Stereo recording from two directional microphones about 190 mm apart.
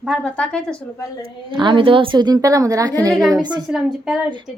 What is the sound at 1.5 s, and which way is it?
Speech, 25° right (ahead or behind).